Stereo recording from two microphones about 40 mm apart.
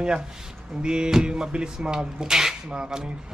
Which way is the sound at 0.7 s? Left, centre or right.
Right.